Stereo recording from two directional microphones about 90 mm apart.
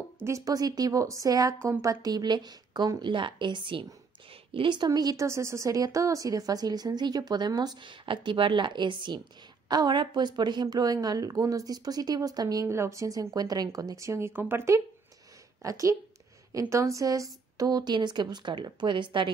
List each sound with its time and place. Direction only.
0.2 s a woman's voice: 40° right (ahead or behind)
3.0 s a woman's voice: 65° right (ahead or behind); by 5.2 s 50° right (ahead or behind)
5.2 s a woman's voice: 30° right (ahead or behind)
12.6 s a woman's voice: 30° right (ahead or behind); by 19.3 s 65° right (ahead or behind)